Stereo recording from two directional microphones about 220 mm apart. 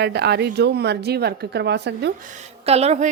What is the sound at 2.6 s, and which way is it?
Speech, 30° right (ahead or behind).